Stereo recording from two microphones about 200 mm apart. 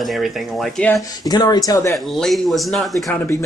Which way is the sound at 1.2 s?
20° left (ahead or behind).